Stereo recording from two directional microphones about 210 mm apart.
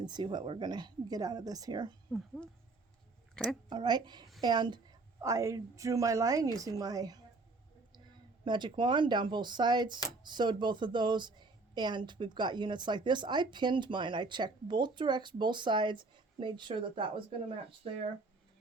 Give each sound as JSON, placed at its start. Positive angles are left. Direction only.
{"t": 0.0, "sound": "a woman's voice", "side_deg": -20}
{"t": 2.1, "sound": "a woman's voice", "side_deg": 0}
{"t": 3.7, "sound": "a woman's voice", "side_deg": -20}
{"t": 8.4, "sound": "a woman's voice", "side_deg": -20}